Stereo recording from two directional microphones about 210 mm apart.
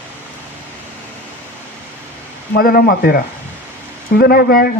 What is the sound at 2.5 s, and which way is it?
Speech, 45° left (ahead or behind).